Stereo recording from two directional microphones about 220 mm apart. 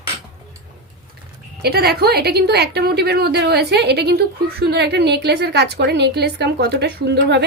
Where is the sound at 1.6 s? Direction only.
45° right (ahead or behind).